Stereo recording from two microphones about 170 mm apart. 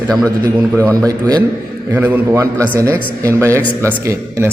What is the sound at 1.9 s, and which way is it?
A man's voice, 10° right (ahead or behind).